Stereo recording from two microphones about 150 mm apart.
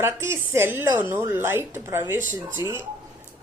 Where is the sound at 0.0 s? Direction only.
15° right (ahead or behind).